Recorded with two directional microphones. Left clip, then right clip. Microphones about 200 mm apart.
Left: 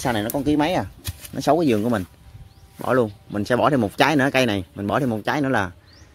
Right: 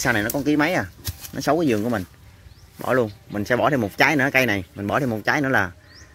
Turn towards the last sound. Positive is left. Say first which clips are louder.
# right 2 dB
turn(degrees=15)  # may be behind; listen again after turning